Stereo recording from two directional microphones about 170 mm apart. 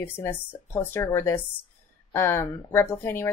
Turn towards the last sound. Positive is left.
turn(degrees=15)  # may be behind; listen again after turning